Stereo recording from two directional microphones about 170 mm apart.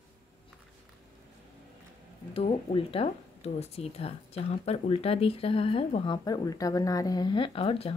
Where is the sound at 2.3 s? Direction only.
30° left (ahead or behind).